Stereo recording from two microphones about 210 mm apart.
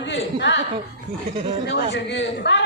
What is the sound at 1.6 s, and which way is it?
Speech, 55° left (ahead or behind).